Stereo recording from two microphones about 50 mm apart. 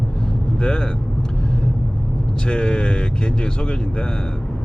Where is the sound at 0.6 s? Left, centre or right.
Centre.